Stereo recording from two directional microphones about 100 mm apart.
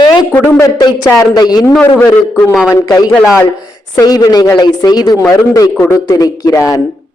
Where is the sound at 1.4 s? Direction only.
40° left (ahead or behind).